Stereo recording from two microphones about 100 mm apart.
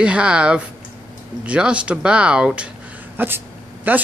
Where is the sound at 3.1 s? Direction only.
20° right (ahead or behind).